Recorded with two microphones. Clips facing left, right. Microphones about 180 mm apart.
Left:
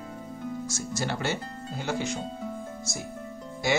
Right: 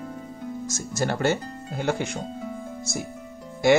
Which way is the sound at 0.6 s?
45° right (ahead or behind).